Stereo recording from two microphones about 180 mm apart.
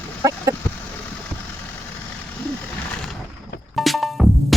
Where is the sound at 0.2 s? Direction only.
20° right (ahead or behind).